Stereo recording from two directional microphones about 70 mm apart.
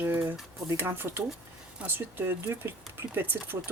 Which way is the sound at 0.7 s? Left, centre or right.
Right.